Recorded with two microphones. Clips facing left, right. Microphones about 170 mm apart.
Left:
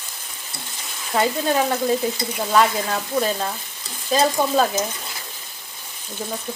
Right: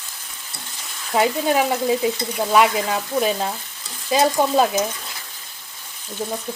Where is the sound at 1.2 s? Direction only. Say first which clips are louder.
Right 2 dB; 10° right (ahead or behind).